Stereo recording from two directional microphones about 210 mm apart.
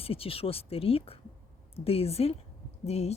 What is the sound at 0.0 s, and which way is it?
Speech, 25° left (ahead or behind).